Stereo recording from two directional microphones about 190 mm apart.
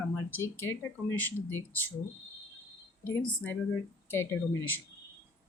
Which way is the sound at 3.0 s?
10° left (ahead or behind).